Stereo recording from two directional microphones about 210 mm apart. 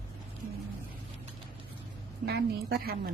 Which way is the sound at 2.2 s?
50° right (ahead or behind).